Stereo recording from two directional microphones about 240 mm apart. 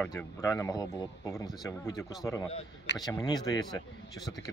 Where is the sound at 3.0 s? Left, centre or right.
Centre.